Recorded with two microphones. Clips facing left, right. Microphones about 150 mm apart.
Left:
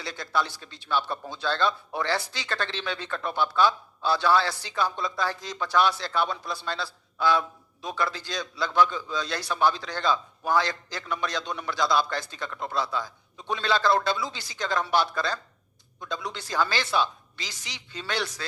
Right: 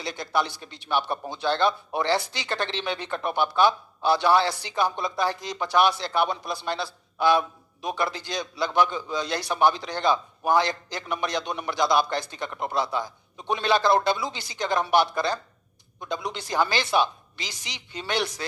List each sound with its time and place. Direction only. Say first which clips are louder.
0.0 s speech: right 2 dB; 15° right (ahead or behind)